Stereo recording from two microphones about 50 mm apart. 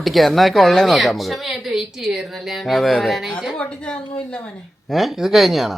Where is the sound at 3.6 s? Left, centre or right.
Left.